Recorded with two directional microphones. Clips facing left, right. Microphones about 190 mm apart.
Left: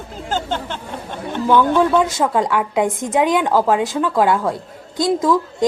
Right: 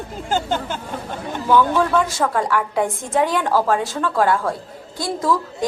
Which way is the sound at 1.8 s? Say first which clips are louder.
Left 3 dB; 20° left (ahead or behind).